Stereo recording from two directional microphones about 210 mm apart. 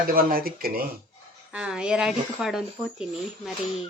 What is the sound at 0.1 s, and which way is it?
Speech, 45° right (ahead or behind).